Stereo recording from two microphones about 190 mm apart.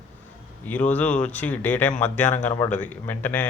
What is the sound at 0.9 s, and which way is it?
A man's voice, 10° left (ahead or behind).